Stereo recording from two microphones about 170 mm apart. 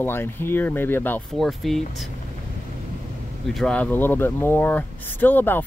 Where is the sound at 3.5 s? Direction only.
5° left (ahead or behind).